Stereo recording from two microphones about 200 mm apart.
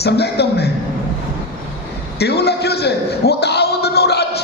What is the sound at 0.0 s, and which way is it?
Speech, 55° left (ahead or behind).